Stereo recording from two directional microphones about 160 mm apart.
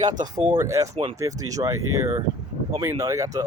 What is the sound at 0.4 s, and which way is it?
Speech, 25° right (ahead or behind).